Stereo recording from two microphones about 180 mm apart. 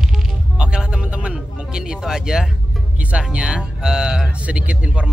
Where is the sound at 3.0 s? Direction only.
5° right (ahead or behind).